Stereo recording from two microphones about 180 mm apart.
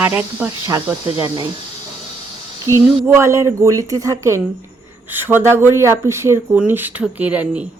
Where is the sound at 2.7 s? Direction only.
15° right (ahead or behind).